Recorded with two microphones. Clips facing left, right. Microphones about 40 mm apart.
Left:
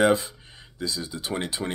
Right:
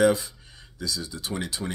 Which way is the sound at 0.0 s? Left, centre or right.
Left.